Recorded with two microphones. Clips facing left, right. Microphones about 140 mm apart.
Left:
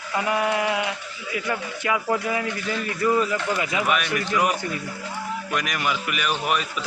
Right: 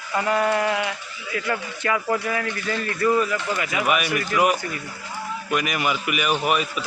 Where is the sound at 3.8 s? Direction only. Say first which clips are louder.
Right 1 dB; 10° right (ahead or behind).